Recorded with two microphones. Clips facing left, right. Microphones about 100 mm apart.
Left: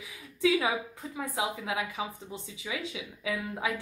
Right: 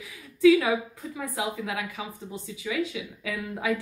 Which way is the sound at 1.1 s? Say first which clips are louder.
Right 1 dB; 20° left (ahead or behind).